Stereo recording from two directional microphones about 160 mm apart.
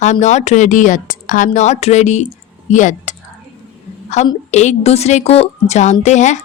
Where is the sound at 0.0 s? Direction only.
45° left (ahead or behind).